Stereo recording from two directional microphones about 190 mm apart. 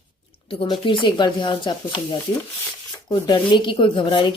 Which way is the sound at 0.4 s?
25° left (ahead or behind).